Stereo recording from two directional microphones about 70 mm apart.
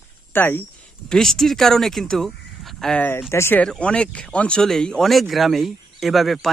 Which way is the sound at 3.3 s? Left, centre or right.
Left.